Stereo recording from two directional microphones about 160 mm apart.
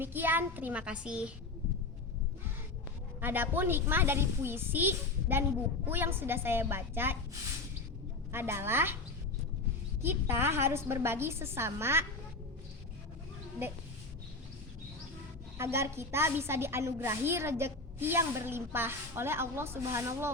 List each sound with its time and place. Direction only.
0.0 s a woman's voice: 10° right (ahead or behind)
3.2 s a woman's voice: 10° right (ahead or behind)
8.3 s a woman's voice: 15° right (ahead or behind)
10.0 s a woman's voice: 15° right (ahead or behind)
15.5 s a woman's voice: 15° right (ahead or behind)